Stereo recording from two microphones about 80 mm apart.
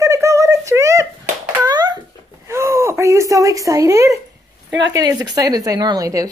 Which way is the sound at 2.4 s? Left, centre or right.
Right.